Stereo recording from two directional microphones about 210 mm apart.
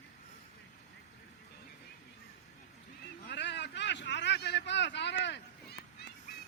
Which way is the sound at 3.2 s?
55° left (ahead or behind).